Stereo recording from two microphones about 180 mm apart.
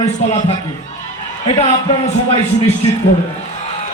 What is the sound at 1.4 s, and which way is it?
A man's voice, 30° left (ahead or behind).